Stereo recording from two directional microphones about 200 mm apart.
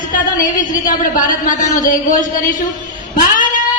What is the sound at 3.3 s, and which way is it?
Cat, 40° left (ahead or behind).